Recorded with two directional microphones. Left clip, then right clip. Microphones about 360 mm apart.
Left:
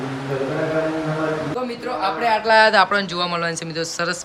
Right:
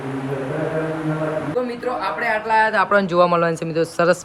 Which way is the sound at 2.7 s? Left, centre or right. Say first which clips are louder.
Right 2 dB; centre.